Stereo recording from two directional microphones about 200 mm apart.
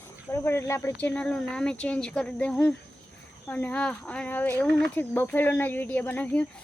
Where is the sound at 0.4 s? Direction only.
10° left (ahead or behind).